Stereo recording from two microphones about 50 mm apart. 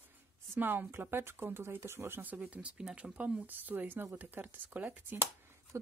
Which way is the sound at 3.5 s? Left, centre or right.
Right.